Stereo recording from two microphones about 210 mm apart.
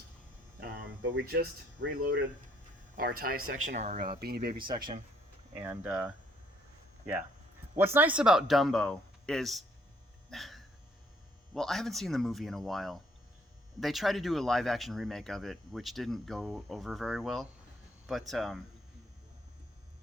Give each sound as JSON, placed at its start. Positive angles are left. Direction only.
{"t": 0.6, "sound": "a sound", "side_deg": -65}
{"t": 1.3, "sound": "speech", "side_deg": -50}
{"t": 3.0, "sound": "speech", "side_deg": -45}
{"t": 4.5, "sound": "speech", "side_deg": -25}
{"t": 5.6, "sound": "speech", "side_deg": -10}
{"t": 10.2, "sound": "a sound", "side_deg": 0}
{"t": 11.5, "sound": "speech", "side_deg": 0}